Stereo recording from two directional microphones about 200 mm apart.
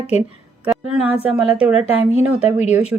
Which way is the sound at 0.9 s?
5° right (ahead or behind).